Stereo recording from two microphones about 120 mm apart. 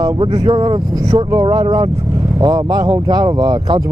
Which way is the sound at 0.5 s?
35° right (ahead or behind).